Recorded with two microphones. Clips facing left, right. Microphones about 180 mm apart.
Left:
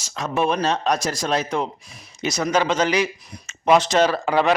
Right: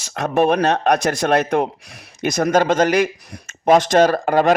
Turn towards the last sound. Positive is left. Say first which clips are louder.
# right 4 dB
turn(degrees=-45)  # may be behind; listen again after turning